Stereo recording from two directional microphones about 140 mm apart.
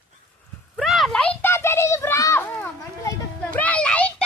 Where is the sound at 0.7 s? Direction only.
Centre (ahead or behind); by 3.1 s 20° left (ahead or behind).